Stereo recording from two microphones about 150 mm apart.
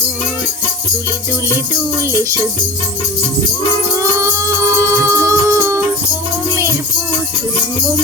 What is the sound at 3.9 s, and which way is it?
Music, 20° right (ahead or behind).